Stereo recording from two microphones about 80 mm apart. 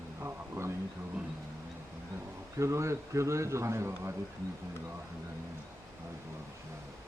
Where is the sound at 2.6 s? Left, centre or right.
Right.